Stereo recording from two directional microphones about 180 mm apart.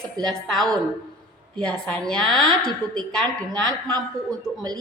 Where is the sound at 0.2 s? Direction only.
Centre (ahead or behind).